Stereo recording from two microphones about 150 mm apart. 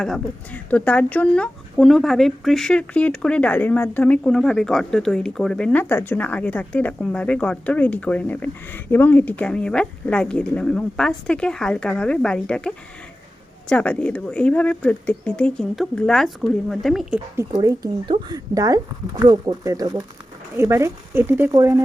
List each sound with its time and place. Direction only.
0.0 s speech: 5° left (ahead or behind)
17.4 s speech: 20° right (ahead or behind)